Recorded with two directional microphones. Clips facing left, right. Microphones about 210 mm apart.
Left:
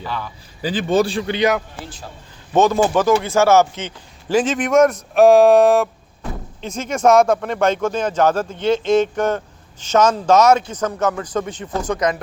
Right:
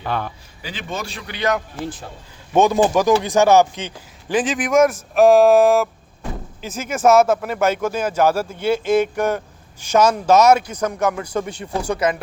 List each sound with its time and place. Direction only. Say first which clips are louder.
0.0 s a man's voice: right 3 dB; 55° right (ahead or behind)
0.6 s a man's voice: left 12 dB; 35° left (ahead or behind)
2.5 s speech: even; 15° right (ahead or behind)
4.4 s a man's voice: left 2 dB; centre (ahead or behind)